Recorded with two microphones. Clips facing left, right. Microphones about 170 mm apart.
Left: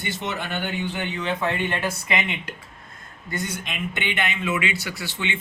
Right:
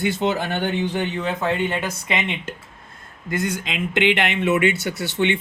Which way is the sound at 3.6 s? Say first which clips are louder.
Right 9 dB; 90° right.